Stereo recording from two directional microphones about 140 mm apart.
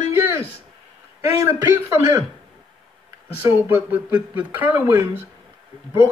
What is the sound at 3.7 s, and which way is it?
Speech, 10° right (ahead or behind).